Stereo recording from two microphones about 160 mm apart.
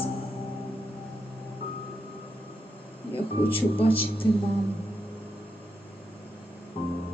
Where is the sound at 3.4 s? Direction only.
35° left (ahead or behind).